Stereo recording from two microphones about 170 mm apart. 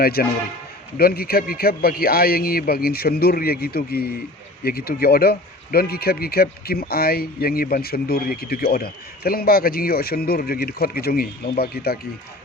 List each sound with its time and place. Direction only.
0.0 s speech: 65° left (ahead or behind)